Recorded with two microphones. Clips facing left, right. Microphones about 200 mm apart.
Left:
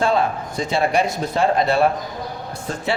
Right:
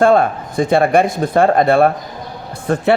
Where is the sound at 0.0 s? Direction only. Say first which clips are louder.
Right 7 dB; 50° right (ahead or behind).